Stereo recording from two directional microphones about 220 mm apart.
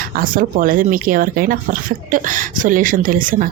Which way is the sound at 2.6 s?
40° right (ahead or behind).